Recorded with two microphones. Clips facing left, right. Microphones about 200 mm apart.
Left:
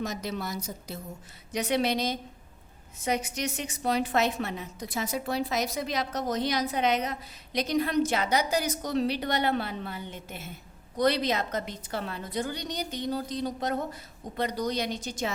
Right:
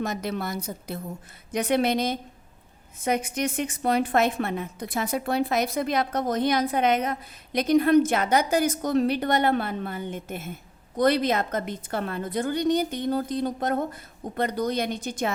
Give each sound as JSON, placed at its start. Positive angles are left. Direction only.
{"t": 0.0, "sound": "a woman's voice", "side_deg": -55}